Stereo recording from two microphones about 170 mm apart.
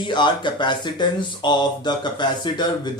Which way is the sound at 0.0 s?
25° left (ahead or behind).